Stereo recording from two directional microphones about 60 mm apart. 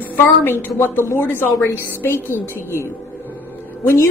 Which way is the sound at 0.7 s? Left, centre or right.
Left.